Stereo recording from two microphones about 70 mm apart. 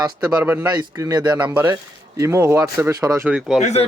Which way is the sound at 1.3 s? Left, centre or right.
Right.